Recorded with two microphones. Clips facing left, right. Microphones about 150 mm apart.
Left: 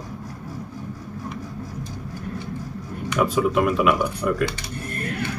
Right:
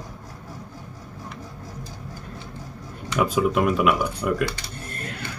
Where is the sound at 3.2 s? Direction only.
Centre (ahead or behind).